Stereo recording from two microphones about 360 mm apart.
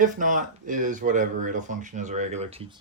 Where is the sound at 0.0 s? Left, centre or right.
Right.